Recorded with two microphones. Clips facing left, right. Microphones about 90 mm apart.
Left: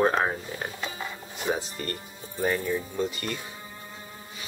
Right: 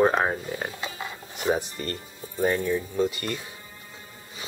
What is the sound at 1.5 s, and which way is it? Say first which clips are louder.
Speech: right 3 dB; 15° right (ahead or behind).